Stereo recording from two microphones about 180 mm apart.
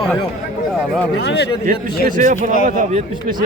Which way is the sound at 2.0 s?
45° right (ahead or behind).